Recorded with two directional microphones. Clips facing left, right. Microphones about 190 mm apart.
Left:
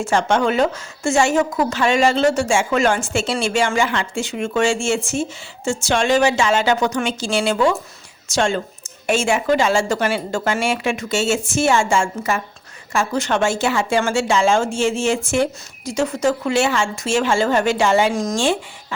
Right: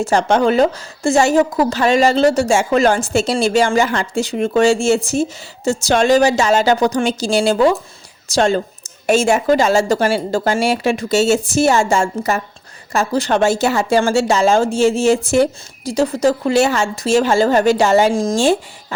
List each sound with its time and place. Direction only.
0.0 s a woman's voice: 35° right (ahead or behind)